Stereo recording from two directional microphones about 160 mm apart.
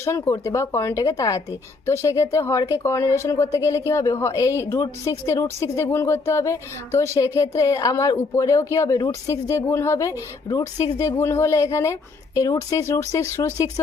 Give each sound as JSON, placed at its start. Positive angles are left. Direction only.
{"t": 0.0, "sound": "speech", "side_deg": 15}